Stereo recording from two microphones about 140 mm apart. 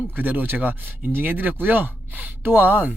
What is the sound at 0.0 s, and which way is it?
Speech, 10° right (ahead or behind).